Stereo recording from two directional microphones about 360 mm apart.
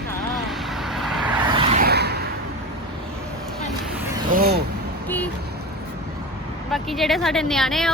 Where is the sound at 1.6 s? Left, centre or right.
Right.